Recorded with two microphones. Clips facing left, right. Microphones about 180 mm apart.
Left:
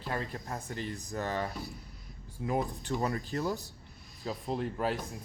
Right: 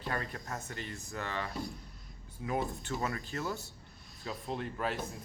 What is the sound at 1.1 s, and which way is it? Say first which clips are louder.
Speech: left 5 dB; 40° left (ahead or behind).